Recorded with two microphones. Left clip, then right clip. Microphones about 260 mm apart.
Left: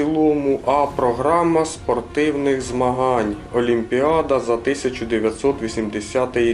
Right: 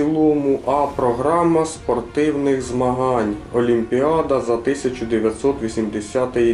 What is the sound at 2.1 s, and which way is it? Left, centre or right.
Speech, centre.